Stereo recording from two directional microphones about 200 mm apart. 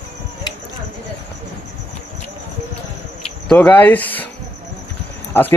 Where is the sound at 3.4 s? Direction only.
5° left (ahead or behind).